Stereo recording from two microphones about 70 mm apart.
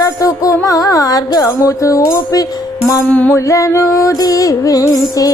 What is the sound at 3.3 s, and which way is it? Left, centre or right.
Music, left.